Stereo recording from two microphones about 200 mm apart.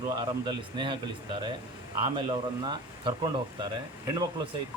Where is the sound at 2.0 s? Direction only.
25° right (ahead or behind).